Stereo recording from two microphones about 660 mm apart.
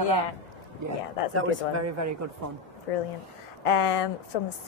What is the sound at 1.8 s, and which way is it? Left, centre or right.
Speech, right.